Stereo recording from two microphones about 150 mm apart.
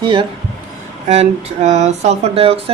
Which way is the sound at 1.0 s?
50° right (ahead or behind).